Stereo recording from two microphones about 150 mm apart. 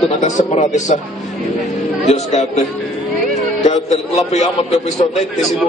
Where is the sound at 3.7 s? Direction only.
45° left (ahead or behind).